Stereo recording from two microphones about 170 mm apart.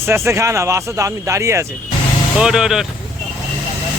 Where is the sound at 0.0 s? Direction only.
15° right (ahead or behind).